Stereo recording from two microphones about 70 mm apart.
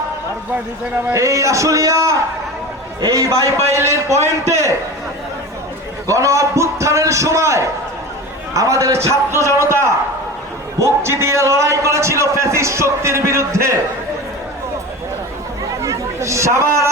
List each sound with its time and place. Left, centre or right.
1.1 s a man's voice: right
6.1 s a man's voice: right
15.8 s chatter: right